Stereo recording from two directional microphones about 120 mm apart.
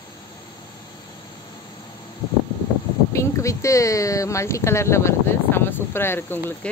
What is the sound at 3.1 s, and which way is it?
Speech, 25° left (ahead or behind).